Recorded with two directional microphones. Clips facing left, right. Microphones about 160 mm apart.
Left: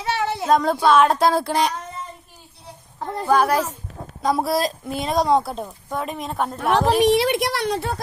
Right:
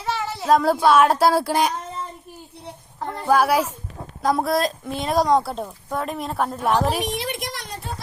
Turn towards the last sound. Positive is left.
turn(degrees=75)  # may be behind; listen again after turning